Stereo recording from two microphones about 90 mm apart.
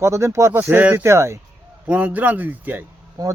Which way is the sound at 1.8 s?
15° right (ahead or behind).